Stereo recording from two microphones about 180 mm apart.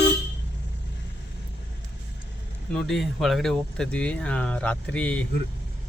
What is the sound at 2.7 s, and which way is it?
Speech, centre (ahead or behind).